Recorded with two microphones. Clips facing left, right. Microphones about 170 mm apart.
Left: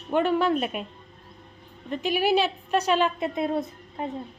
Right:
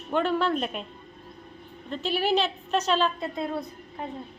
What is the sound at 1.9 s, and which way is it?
A woman's voice, 15° left (ahead or behind).